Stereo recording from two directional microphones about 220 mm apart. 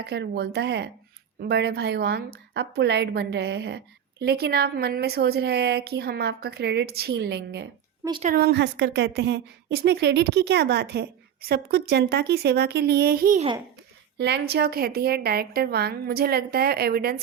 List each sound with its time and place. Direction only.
0.1 s a woman's voice: 50° right (ahead or behind)